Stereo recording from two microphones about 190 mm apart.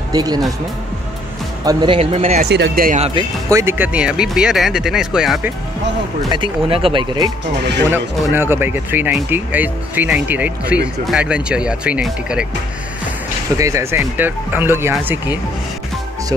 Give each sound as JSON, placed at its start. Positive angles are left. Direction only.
{"t": 0.1, "sound": "speech", "side_deg": -20}
{"t": 1.6, "sound": "speech", "side_deg": -20}
{"t": 2.5, "sound": "speech", "side_deg": -55}
{"t": 3.4, "sound": "speech", "side_deg": -15}
{"t": 6.3, "sound": "speech", "side_deg": -25}
{"t": 7.9, "sound": "speech", "side_deg": -10}
{"t": 13.6, "sound": "speech", "side_deg": -15}